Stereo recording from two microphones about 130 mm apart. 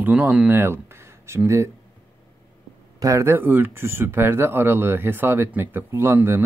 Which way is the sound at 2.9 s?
25° right (ahead or behind).